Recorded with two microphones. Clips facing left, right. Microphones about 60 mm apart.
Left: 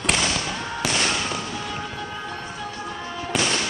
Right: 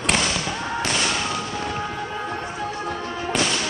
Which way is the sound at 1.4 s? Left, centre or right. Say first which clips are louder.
Right 3 dB; centre.